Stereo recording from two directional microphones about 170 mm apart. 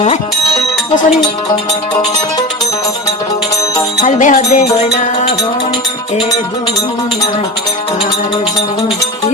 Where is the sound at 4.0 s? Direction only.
45° left (ahead or behind).